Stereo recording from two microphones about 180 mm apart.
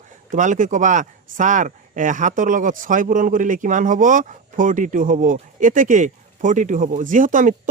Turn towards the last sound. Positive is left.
turn(degrees=-45)  # may be behind; listen again after turning